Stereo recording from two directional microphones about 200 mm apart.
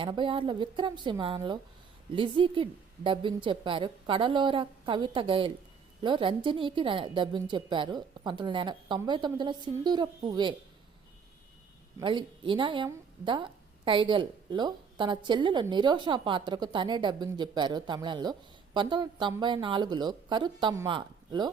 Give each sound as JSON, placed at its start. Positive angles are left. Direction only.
{"t": 0.0, "sound": "a woman's voice", "side_deg": -25}
{"t": 11.9, "sound": "a woman's voice", "side_deg": -25}